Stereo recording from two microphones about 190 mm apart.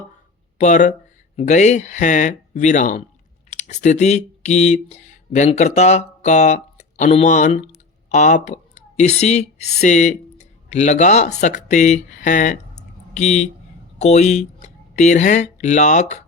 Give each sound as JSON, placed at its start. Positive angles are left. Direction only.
{"t": 0.6, "sound": "speech", "side_deg": 40}